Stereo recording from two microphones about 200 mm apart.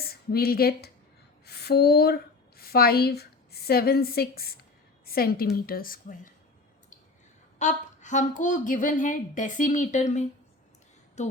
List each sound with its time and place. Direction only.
0.0 s a woman's voice: 50° left (ahead or behind)
7.6 s speech: 35° left (ahead or behind)